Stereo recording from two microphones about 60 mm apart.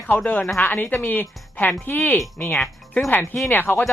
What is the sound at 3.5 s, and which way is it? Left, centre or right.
Speech, left.